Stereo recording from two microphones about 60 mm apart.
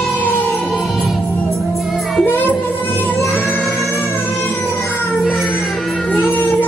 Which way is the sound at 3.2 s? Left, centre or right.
Centre.